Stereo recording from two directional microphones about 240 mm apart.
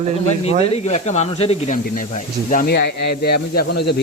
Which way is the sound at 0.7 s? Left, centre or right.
Left.